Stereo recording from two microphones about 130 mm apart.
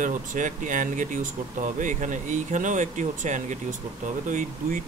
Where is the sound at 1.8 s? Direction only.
80° right.